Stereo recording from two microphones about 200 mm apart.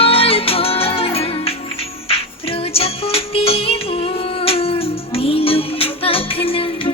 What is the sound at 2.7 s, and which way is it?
Music, 30° left (ahead or behind).